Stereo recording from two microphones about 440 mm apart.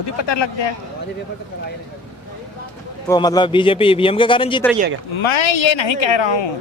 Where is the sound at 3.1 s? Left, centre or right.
Centre.